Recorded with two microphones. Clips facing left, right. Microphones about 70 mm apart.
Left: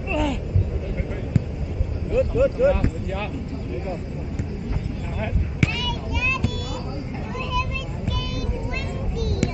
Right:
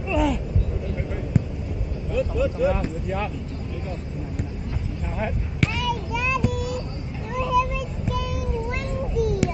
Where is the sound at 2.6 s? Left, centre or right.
Centre.